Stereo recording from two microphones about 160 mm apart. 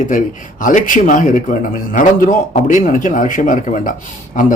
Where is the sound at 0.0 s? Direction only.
55° left (ahead or behind).